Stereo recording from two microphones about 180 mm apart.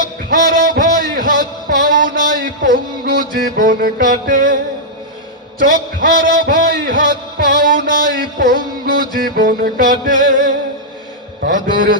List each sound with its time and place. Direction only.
0.3 s music: 50° right (ahead or behind)
5.5 s a man's voice: 50° right (ahead or behind)
11.4 s a man's voice: 50° right (ahead or behind)